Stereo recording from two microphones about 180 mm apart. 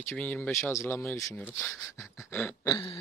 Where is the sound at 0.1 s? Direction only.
5° left (ahead or behind).